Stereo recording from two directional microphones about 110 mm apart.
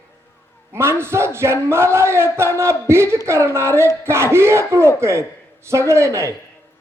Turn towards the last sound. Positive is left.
turn(degrees=-25)  # may be behind; listen again after turning